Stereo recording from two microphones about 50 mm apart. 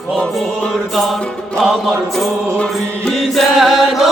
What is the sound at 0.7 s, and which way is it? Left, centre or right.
Music, centre.